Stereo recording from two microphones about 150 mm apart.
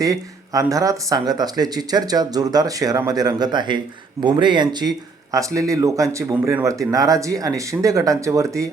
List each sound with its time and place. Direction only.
0.0 s speech: 25° right (ahead or behind)